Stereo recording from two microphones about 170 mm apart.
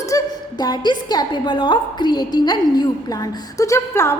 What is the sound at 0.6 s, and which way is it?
A woman's voice, 25° left (ahead or behind).